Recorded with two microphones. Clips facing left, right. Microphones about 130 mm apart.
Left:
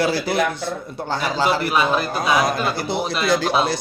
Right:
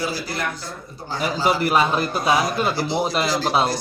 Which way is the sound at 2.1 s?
50° left (ahead or behind).